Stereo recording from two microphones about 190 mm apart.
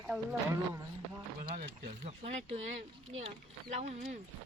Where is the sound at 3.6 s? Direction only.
35° right (ahead or behind).